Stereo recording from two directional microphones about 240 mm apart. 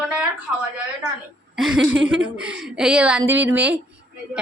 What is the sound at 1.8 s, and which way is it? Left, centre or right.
Speech, right.